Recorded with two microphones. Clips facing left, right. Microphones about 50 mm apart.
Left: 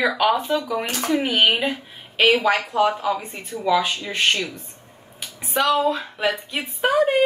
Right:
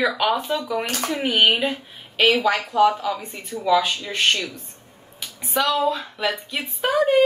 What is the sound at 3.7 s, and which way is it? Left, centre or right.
A woman's voice, centre.